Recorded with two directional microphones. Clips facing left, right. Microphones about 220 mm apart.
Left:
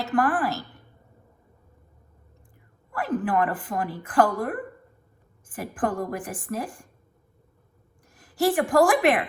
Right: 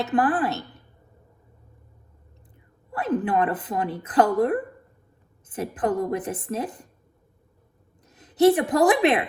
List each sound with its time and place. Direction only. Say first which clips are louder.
0.0 s a woman's voice: right 2 dB; 20° right (ahead or behind)
2.9 s a woman's voice: right 2 dB; 20° right (ahead or behind)
8.0 s a woman's voice: right 6 dB; 20° right (ahead or behind)